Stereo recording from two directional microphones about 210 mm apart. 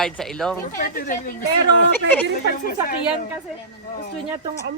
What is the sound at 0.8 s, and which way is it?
Speech, 40° left (ahead or behind).